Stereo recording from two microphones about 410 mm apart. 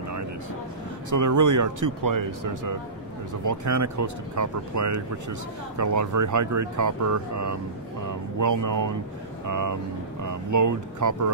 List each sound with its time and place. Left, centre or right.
1.1 s speech: right